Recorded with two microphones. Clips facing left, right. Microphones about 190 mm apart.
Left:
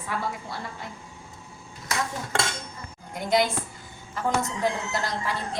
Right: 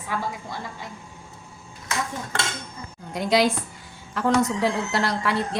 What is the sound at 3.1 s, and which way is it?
A woman's voice, 80° right.